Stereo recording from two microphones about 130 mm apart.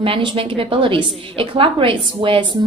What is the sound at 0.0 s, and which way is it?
A woman's voice, 40° right (ahead or behind).